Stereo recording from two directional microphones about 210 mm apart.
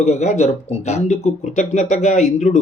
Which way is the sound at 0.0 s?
30° left (ahead or behind).